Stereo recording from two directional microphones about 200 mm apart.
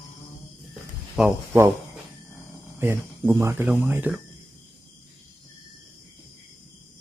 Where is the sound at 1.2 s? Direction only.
5° right (ahead or behind).